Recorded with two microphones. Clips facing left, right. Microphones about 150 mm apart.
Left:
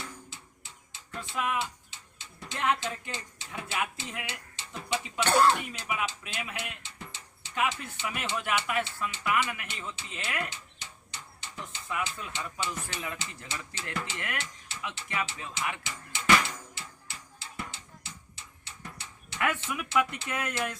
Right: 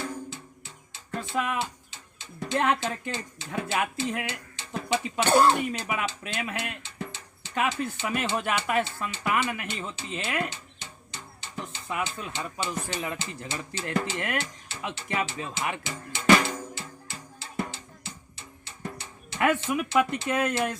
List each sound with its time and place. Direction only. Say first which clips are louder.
1.1 s speech: right 3 dB; 40° right (ahead or behind)
5.3 s speech: right 3 dB; 20° right (ahead or behind)
5.5 s speech: right 5 dB; 45° right (ahead or behind)
7.5 s speech: right 3 dB; 40° right (ahead or behind)
14.7 s drum: right 4 dB; 35° right (ahead or behind)
18.8 s speech: right 9 dB; 35° right (ahead or behind)